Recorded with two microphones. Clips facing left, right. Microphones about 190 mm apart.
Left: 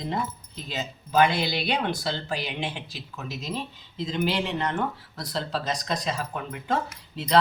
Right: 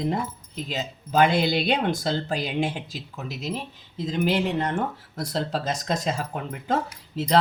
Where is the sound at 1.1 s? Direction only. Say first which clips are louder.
Right 2 dB; 45° right (ahead or behind).